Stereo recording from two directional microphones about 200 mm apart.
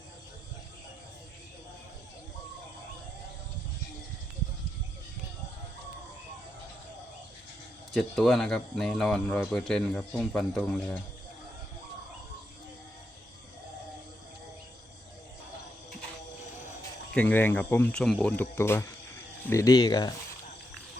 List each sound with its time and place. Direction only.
7.9 s speech: centre (ahead or behind)
17.2 s speech: 10° left (ahead or behind)